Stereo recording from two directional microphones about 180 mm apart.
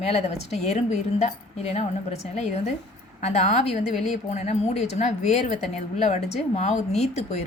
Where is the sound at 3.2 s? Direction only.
35° left (ahead or behind).